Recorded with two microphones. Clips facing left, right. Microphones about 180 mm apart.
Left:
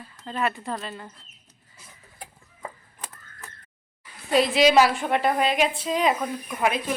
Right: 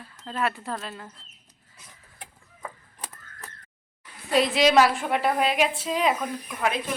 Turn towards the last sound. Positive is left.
turn(degrees=10)  # may be behind; listen again after turning